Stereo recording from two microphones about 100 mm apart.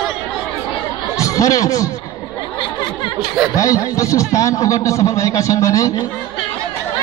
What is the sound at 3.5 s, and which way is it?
A man's voice, 35° left (ahead or behind).